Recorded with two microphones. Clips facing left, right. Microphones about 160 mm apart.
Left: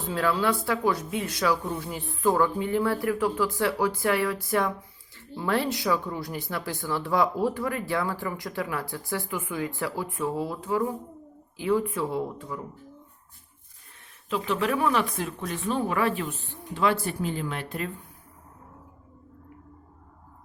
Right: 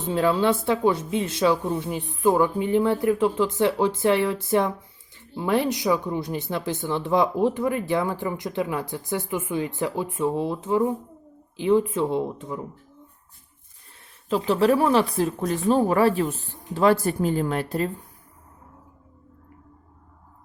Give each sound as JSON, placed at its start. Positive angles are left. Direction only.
{"t": 0.0, "sound": "speech", "side_deg": -25}
{"t": 14.3, "sound": "speech", "side_deg": -35}